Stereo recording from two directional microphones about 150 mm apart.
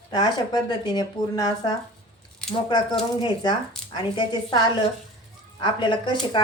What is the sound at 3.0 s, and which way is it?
Speech, 30° left (ahead or behind).